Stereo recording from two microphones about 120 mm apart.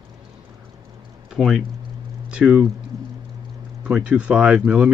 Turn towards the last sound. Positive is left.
turn(degrees=-10)  # may be behind; listen again after turning